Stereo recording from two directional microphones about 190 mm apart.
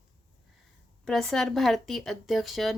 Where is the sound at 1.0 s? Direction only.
Centre (ahead or behind).